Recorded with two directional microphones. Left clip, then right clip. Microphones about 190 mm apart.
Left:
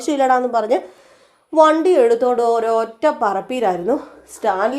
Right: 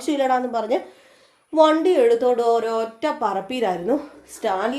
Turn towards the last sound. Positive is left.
turn(degrees=20)  # may be behind; listen again after turning